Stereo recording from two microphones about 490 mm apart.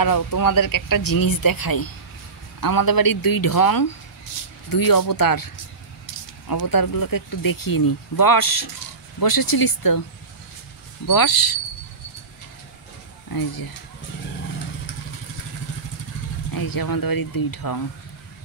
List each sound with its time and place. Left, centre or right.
0.0 s speech: left
11.1 s speech: left
13.3 s speech: left
16.5 s speech: left